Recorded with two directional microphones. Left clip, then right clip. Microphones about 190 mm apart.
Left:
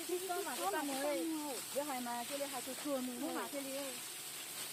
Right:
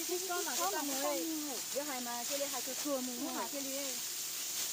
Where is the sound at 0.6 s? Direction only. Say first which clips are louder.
Right 1 dB; 50° right (ahead or behind).